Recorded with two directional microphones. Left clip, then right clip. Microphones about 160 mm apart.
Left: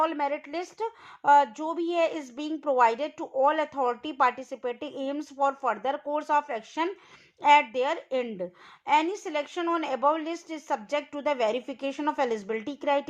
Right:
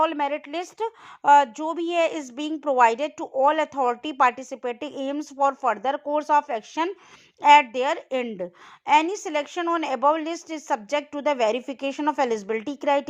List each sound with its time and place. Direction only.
0.0 s a woman's voice: 25° right (ahead or behind)